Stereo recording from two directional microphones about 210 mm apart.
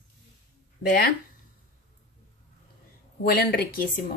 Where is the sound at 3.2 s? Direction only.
45° left (ahead or behind).